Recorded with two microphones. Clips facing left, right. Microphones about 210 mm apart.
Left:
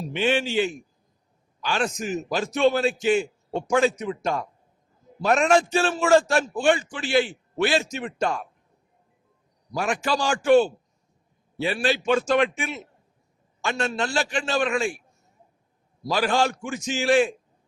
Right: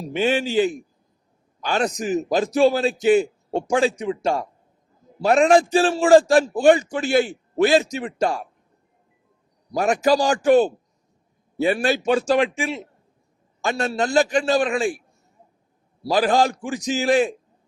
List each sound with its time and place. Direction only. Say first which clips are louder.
0.0 s a man's voice: right 2 dB; 40° right (ahead or behind)
9.7 s a man's voice: right 7 dB; 40° right (ahead or behind)
16.1 s a man's voice: right 4 dB; 35° right (ahead or behind)